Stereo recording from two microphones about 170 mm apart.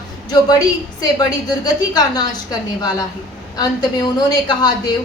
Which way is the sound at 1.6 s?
25° left (ahead or behind).